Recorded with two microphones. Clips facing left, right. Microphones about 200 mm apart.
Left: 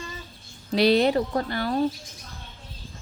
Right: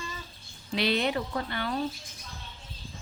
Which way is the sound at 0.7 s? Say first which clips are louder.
Left 8 dB; 40° left (ahead or behind).